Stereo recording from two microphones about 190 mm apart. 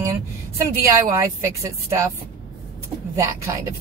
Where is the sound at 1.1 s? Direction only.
15° right (ahead or behind).